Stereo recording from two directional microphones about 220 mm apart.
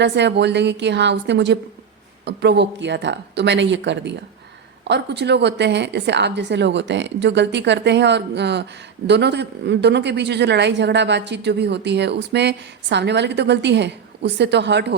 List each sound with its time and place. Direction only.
0.0 s a woman's voice: 50° right (ahead or behind)